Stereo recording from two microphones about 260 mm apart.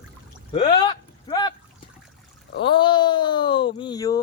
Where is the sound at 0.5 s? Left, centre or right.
Centre.